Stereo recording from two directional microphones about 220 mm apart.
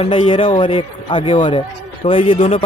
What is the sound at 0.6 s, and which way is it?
Speech, 20° left (ahead or behind).